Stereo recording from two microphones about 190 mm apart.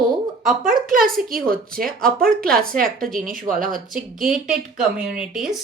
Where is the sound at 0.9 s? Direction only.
50° right (ahead or behind).